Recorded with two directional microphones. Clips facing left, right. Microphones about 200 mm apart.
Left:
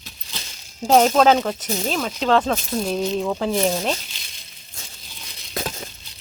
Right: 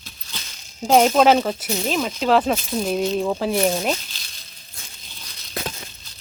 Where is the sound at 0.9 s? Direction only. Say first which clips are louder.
Even; 5° right (ahead or behind).